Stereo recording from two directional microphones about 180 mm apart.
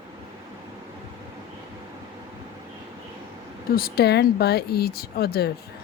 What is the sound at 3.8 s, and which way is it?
Speech, 60° left (ahead or behind).